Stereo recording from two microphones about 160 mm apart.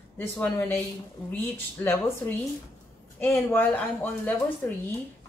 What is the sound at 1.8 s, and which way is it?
Speech, 10° left (ahead or behind).